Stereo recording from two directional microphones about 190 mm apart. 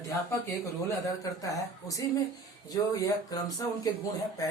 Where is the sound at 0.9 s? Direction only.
15° left (ahead or behind).